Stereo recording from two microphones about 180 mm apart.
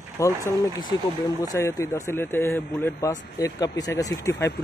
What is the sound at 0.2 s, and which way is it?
Speech, 15° left (ahead or behind).